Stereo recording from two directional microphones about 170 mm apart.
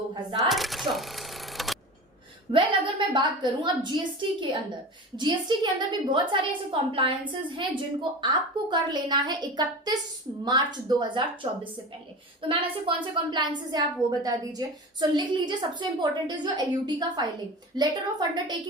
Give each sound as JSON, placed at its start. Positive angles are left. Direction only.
{"t": 0.1, "sound": "speech", "side_deg": -25}
{"t": 0.4, "sound": "a sound", "side_deg": 0}
{"t": 2.5, "sound": "a woman's voice", "side_deg": -30}
{"t": 8.2, "sound": "a woman's voice", "side_deg": -25}
{"t": 12.4, "sound": "a woman's voice", "side_deg": -30}